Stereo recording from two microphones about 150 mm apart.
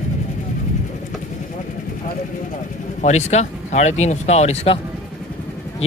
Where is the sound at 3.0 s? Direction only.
50° left (ahead or behind).